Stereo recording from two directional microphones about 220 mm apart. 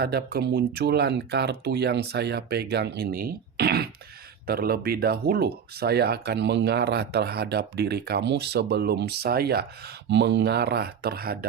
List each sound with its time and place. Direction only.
0.0 s speech: 45° right (ahead or behind)